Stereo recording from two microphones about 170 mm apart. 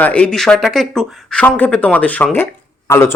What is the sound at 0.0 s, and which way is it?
Speech, 5° left (ahead or behind).